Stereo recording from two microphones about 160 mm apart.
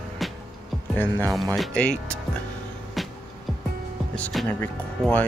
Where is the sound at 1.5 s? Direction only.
5° left (ahead or behind).